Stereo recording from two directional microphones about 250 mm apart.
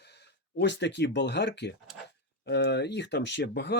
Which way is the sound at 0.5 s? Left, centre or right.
Left.